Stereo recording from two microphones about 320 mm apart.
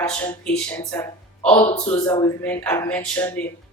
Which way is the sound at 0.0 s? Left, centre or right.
Centre.